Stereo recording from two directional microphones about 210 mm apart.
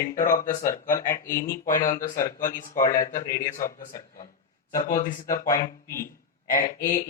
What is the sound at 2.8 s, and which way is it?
Speech, 40° left (ahead or behind).